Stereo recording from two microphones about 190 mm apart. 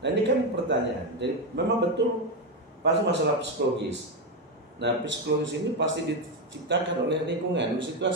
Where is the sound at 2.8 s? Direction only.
65° right (ahead or behind).